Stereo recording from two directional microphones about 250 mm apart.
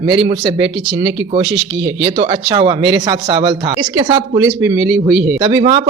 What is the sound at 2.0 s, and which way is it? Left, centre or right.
Speech, right.